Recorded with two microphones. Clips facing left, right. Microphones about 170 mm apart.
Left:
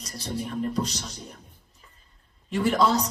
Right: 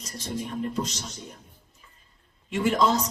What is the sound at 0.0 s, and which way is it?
A man's voice, 35° left (ahead or behind).